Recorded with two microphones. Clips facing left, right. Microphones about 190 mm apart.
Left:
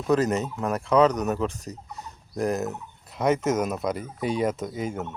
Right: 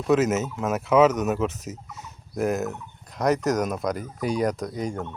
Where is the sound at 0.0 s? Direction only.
Centre (ahead or behind).